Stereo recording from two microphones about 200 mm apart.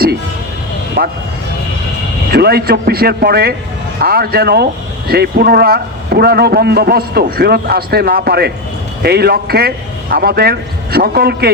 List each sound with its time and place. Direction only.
2.3 s a man's voice: 50° right (ahead or behind)